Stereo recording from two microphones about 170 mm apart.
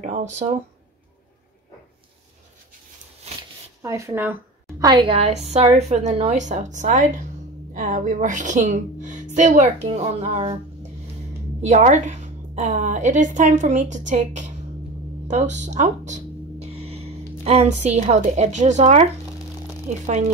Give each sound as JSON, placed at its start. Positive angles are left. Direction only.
{"t": 0.0, "sound": "a woman's voice", "side_deg": -45}
{"t": 3.8, "sound": "a woman's voice", "side_deg": -15}
{"t": 5.1, "sound": "a woman's voice", "side_deg": -40}